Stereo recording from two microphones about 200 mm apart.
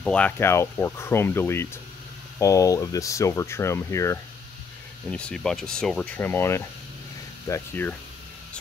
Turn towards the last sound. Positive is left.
turn(degrees=10)  # may be behind; listen again after turning